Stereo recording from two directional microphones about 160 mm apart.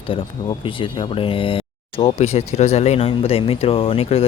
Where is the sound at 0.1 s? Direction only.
35° left (ahead or behind).